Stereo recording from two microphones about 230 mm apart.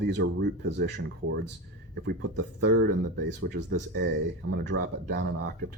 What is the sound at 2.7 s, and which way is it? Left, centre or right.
Speech, right.